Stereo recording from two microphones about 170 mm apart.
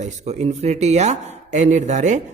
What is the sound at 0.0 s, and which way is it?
Speech, 40° right (ahead or behind).